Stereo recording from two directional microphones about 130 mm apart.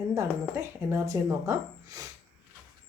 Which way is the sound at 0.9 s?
20° right (ahead or behind).